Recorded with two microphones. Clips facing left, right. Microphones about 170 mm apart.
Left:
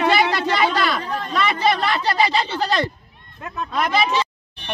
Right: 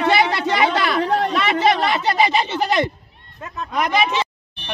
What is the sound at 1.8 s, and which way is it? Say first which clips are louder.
Speech: right 2 dB; 20° right (ahead or behind).